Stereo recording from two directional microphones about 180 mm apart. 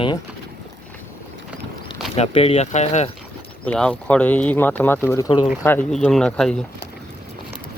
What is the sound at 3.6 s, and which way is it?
Speech, 5° left (ahead or behind).